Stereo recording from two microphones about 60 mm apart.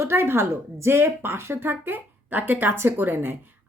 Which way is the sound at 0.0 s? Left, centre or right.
Right.